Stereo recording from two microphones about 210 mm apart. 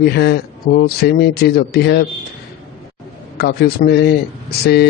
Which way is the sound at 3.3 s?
45° left (ahead or behind).